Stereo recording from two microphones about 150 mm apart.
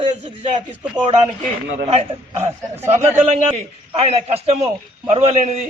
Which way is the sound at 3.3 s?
45° right (ahead or behind).